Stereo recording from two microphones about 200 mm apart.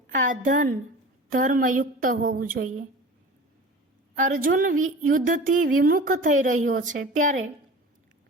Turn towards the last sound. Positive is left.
turn(degrees=-40)  # may be behind; listen again after turning